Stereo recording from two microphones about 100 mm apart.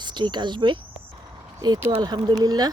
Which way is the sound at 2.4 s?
40° right (ahead or behind).